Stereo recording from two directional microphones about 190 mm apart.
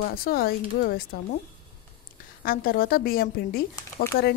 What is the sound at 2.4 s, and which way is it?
A woman's voice, 50° left (ahead or behind).